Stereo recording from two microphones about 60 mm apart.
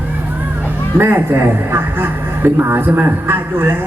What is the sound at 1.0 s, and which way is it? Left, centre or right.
A man's voice, right.